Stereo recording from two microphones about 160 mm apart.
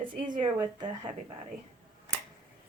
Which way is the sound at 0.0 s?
25° right (ahead or behind).